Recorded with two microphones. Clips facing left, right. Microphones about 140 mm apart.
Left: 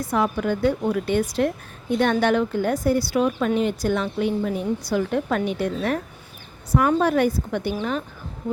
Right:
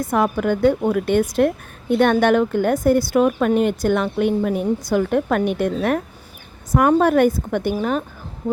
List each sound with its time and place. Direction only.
0.0 s a woman's voice: 55° right (ahead or behind)